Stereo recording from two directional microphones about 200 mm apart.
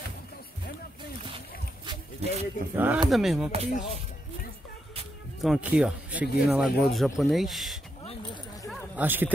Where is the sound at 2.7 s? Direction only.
10° right (ahead or behind).